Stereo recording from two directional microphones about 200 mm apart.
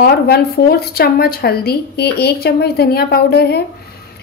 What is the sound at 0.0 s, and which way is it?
Speech, 50° left (ahead or behind).